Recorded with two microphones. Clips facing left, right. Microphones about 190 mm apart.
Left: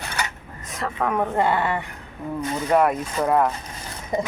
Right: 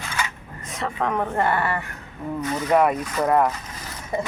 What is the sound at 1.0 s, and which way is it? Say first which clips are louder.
Speech: left 2 dB; 10° left (ahead or behind).